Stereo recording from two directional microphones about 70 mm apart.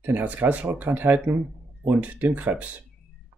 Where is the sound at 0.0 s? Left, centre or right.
Right.